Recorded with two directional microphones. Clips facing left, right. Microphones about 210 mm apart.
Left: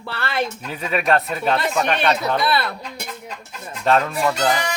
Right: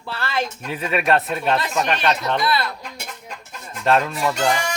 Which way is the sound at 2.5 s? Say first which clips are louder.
Left 1 dB; 60° left (ahead or behind).